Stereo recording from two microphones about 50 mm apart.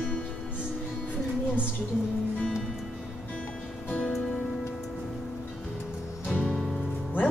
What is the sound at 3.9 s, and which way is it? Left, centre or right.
Music, left.